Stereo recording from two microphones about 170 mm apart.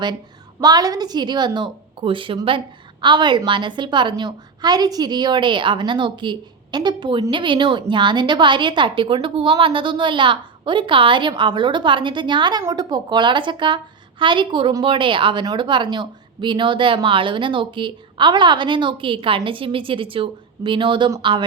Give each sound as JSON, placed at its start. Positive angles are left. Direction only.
{"t": 0.6, "sound": "a woman's voice", "side_deg": -20}